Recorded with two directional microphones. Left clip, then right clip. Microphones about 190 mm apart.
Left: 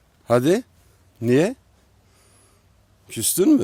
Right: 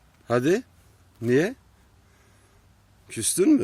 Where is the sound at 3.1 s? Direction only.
20° left (ahead or behind).